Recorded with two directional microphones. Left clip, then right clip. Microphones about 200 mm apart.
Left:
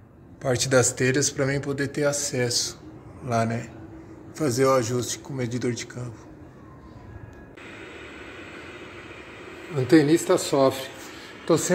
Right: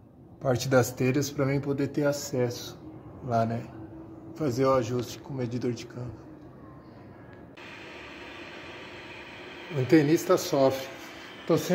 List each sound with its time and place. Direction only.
0.4 s a man's voice: 15° right (ahead or behind); by 6.0 s centre (ahead or behind)
9.8 s a man's voice: 5° right (ahead or behind)